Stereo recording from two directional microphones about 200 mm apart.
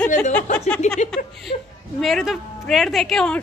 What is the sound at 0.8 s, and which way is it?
Speech, 35° left (ahead or behind).